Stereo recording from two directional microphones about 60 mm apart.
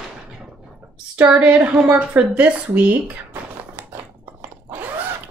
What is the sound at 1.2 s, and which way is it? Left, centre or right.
Speech, right.